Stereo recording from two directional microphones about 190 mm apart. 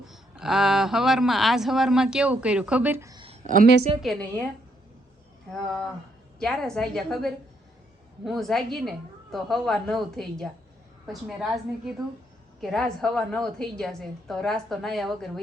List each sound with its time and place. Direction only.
0.0 s speech: centre (ahead or behind); by 3.2 s 15° right (ahead or behind)
3.2 s a sound: 40° right (ahead or behind)
4.0 s speech: 5° left (ahead or behind)
5.5 s speech: 5° left (ahead or behind)